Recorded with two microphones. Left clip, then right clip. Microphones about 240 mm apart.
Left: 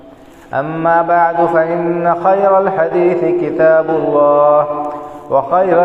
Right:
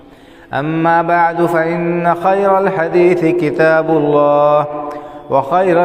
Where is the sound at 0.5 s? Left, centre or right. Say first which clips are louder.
Even; right.